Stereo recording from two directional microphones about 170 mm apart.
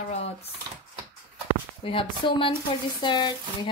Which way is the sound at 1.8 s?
30° left (ahead or behind).